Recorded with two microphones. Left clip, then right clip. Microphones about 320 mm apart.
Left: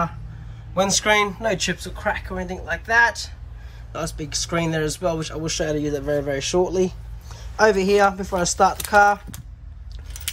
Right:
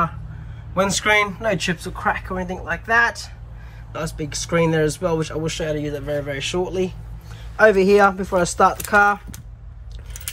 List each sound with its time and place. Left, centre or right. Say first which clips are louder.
0.7 s speech: right 1 dB; centre